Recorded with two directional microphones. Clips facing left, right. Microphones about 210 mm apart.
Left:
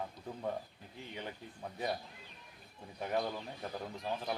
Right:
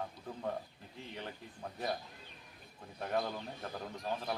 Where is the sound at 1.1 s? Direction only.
Centre (ahead or behind).